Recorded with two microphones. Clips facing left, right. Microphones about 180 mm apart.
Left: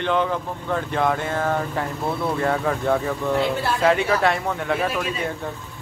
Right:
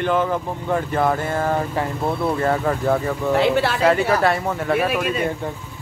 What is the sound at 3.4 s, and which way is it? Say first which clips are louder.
Speech: right 4 dB; 90° right.